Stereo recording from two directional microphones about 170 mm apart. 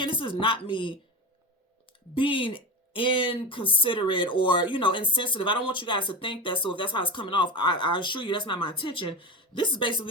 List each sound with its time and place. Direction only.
0.0 s speech: 30° left (ahead or behind)
2.1 s speech: 30° left (ahead or behind)